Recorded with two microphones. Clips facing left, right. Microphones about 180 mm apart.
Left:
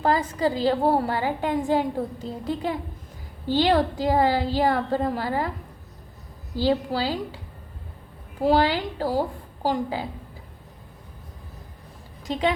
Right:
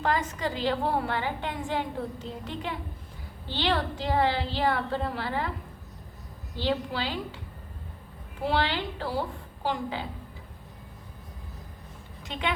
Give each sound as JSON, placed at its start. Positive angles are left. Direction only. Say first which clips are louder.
{"t": 0.0, "sound": "a woman's voice", "louder": "left 6 dB", "side_deg": 35}
{"t": 6.6, "sound": "a woman's voice", "louder": "left 6 dB", "side_deg": 40}
{"t": 8.4, "sound": "a woman's voice", "louder": "left 7 dB", "side_deg": 40}
{"t": 12.2, "sound": "speech", "louder": "left 7 dB", "side_deg": 40}